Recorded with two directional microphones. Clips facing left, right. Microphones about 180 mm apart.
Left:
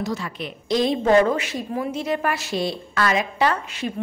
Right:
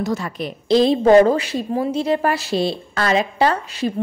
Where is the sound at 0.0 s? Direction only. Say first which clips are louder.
Right 4 dB; 45° right (ahead or behind).